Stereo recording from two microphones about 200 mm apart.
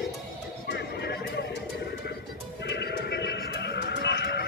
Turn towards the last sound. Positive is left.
turn(degrees=55)  # may be behind; listen again after turning